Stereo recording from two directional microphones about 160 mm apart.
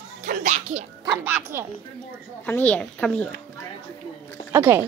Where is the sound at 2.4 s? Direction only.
10° left (ahead or behind).